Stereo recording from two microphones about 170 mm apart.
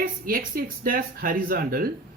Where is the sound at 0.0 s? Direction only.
55° right (ahead or behind).